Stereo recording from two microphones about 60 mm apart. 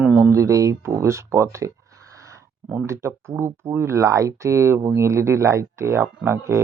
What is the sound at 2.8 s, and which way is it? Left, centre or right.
Speech, right.